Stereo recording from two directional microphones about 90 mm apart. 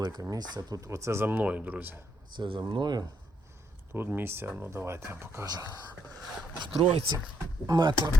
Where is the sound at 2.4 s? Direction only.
55° right (ahead or behind).